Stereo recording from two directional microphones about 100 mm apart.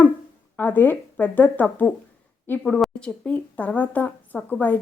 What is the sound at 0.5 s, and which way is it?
Speech, 15° left (ahead or behind).